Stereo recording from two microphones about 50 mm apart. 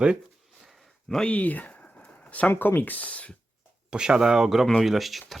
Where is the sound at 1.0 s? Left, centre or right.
Centre.